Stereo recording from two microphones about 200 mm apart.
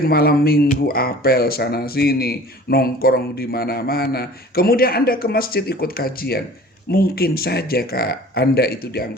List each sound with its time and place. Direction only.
0.1 s speech: 50° left (ahead or behind)